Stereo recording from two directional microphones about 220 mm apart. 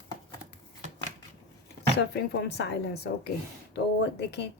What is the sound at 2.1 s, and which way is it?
Speech, 50° left (ahead or behind).